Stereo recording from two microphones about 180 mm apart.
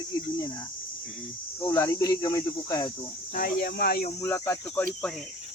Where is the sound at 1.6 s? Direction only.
15° left (ahead or behind).